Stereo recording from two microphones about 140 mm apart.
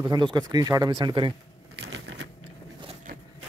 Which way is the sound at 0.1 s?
30° right (ahead or behind).